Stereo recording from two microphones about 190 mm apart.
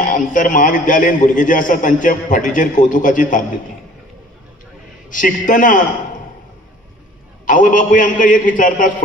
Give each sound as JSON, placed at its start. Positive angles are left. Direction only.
{"t": 0.0, "sound": "a man's voice", "side_deg": 45}
{"t": 5.1, "sound": "a man's voice", "side_deg": 45}
{"t": 7.4, "sound": "a man's voice", "side_deg": 45}